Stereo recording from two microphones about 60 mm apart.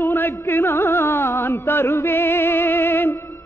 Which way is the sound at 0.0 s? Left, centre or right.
Left.